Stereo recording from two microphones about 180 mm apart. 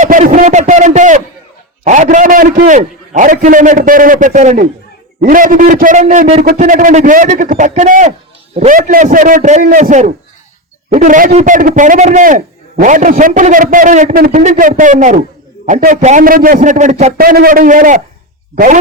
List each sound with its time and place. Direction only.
0.0 s a man's voice: 45° right (ahead or behind)